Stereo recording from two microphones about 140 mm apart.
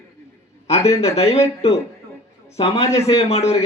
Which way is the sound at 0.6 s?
50° left (ahead or behind).